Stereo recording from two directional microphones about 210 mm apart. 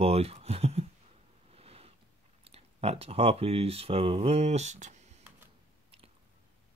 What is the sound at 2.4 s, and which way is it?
Speech, 30° right (ahead or behind).